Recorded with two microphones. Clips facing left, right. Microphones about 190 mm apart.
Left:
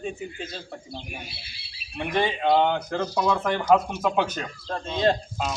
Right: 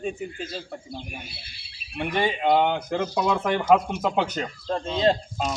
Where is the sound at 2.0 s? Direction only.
15° right (ahead or behind).